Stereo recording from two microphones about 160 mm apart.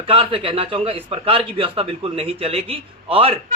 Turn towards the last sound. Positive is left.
turn(degrees=-35)  # may be behind; listen again after turning